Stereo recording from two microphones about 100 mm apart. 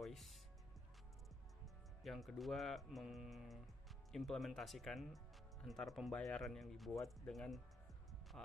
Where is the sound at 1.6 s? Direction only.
Centre (ahead or behind).